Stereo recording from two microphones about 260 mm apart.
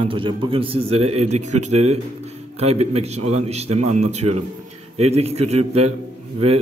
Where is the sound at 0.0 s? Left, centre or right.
Centre.